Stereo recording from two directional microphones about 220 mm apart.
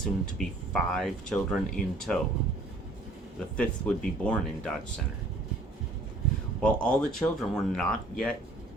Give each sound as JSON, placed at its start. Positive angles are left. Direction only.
{"t": 0.3, "sound": "speech", "side_deg": 5}
{"t": 3.6, "sound": "speech", "side_deg": 5}
{"t": 6.6, "sound": "speech", "side_deg": 5}